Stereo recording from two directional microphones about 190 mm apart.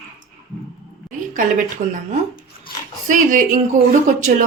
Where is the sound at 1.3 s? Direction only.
45° right (ahead or behind).